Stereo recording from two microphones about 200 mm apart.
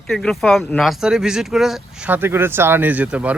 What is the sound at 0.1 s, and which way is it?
Speech, centre (ahead or behind).